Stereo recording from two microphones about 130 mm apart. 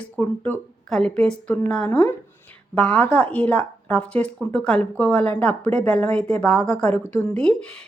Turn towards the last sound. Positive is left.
turn(degrees=10)  # may be behind; listen again after turning